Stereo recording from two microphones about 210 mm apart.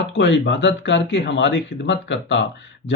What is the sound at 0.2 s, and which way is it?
Speech, 55° left (ahead or behind).